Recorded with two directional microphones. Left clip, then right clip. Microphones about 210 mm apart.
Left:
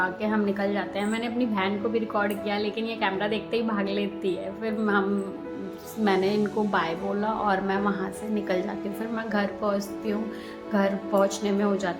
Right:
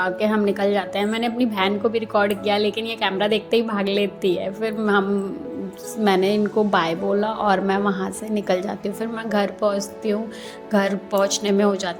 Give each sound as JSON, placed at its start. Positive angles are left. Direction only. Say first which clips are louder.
{"t": 0.0, "sound": "a woman's voice", "louder": "right 6 dB", "side_deg": -35}
{"t": 6.1, "sound": "a woman's voice", "louder": "right 5 dB", "side_deg": -35}